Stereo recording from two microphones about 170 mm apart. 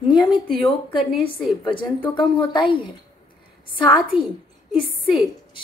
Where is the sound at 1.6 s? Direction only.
30° left (ahead or behind).